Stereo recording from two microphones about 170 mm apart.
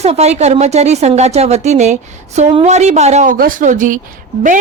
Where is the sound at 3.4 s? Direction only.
55° right (ahead or behind).